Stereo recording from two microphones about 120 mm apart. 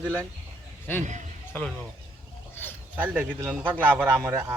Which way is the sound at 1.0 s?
90° right.